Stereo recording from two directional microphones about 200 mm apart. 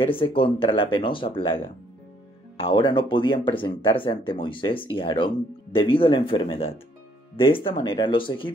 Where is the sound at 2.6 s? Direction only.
25° left (ahead or behind).